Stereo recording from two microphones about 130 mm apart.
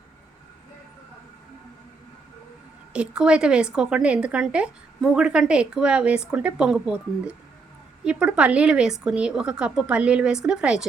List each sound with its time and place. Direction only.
2.9 s a woman's voice: 5° right (ahead or behind)